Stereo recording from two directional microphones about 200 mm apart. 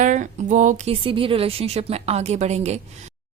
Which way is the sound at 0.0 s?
40° right (ahead or behind).